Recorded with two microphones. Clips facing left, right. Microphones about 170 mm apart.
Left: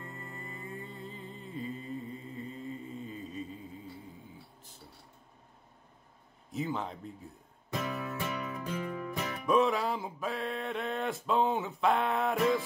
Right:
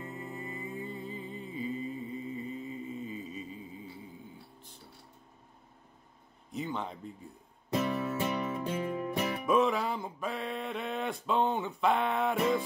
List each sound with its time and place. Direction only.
0.0 s music: 5° right (ahead or behind)
6.5 s a man's voice: centre (ahead or behind)
7.7 s music: 25° right (ahead or behind)
9.5 s a sound: centre (ahead or behind)